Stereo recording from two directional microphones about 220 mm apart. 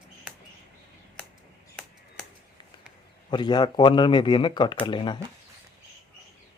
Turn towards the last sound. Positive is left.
turn(degrees=20)  # may be behind; listen again after turning